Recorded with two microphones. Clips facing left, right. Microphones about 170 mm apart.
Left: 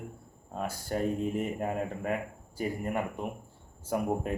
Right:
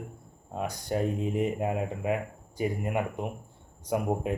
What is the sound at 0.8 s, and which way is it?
Speech, 10° right (ahead or behind).